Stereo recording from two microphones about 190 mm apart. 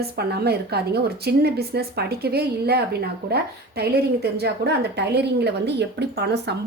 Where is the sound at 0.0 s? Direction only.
60° right (ahead or behind).